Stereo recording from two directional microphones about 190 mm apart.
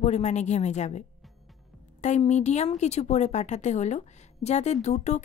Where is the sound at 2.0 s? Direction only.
35° left (ahead or behind).